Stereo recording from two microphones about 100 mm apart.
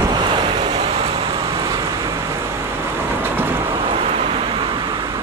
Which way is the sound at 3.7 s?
70° right (ahead or behind).